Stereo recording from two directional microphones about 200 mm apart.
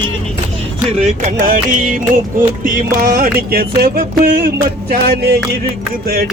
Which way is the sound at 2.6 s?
45° right (ahead or behind).